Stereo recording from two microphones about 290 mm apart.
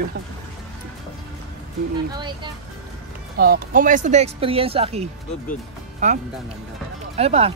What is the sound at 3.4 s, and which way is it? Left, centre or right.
Speech, right.